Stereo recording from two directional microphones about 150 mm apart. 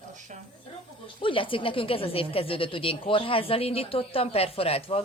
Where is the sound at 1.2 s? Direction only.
35° left (ahead or behind).